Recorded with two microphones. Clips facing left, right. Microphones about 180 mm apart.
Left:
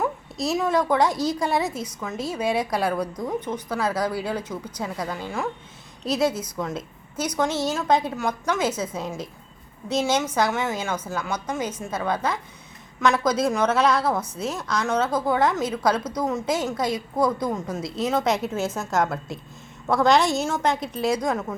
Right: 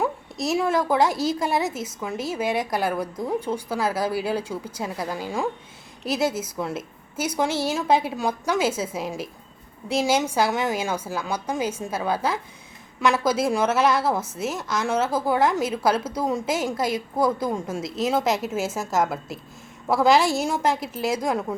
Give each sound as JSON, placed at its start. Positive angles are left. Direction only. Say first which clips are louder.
{"t": 0.4, "sound": "a woman's voice", "louder": "even", "side_deg": -5}
{"t": 1.1, "sound": "a woman's voice", "louder": "even", "side_deg": -25}
{"t": 1.4, "sound": "a woman's voice", "louder": "even", "side_deg": 0}
{"t": 1.7, "sound": "a woman's voice", "louder": "even", "side_deg": -25}
{"t": 2.3, "sound": "a woman's voice", "louder": "left 1 dB", "side_deg": 0}